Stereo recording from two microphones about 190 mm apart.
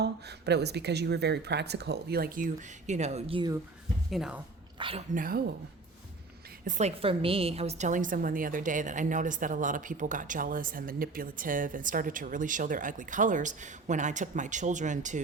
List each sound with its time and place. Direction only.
0.0 s speech: 60° right (ahead or behind); by 3.5 s 30° right (ahead or behind)
4.1 s speech: 5° right (ahead or behind)
4.8 s speech: 30° right (ahead or behind)
5.1 s a woman's voice: 50° right (ahead or behind)
6.7 s a woman's voice: 35° right (ahead or behind)